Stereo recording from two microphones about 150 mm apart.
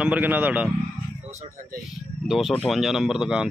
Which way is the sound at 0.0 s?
10° right (ahead or behind).